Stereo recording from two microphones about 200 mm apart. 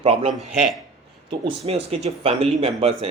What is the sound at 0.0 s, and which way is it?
A man's voice, 30° right (ahead or behind).